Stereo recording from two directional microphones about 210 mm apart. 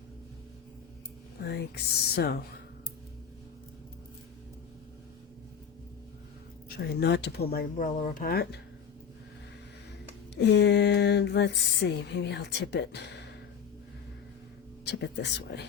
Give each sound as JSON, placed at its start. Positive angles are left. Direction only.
{"t": 1.5, "sound": "speech", "side_deg": 50}
{"t": 6.7, "sound": "speech", "side_deg": 50}
{"t": 10.4, "sound": "speech", "side_deg": 55}
{"t": 14.8, "sound": "speech", "side_deg": 55}